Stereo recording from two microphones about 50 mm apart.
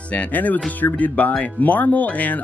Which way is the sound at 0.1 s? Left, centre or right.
Left.